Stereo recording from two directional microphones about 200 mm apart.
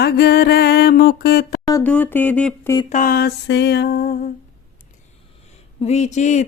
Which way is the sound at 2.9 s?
45° left (ahead or behind).